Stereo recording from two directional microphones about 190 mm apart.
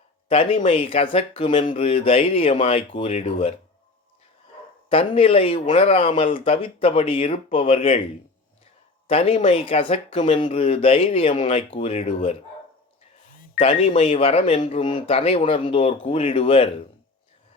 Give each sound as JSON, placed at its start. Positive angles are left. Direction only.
{"t": 0.3, "sound": "speech", "side_deg": 30}
{"t": 4.9, "sound": "speech", "side_deg": 30}
{"t": 9.0, "sound": "speech", "side_deg": 30}
{"t": 13.6, "sound": "speech", "side_deg": 30}